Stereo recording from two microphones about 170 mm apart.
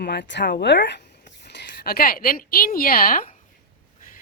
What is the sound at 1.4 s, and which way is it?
Speech, 80° left.